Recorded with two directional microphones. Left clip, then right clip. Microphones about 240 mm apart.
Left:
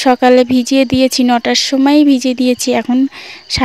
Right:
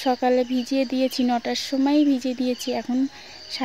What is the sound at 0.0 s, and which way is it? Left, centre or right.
Speech, left.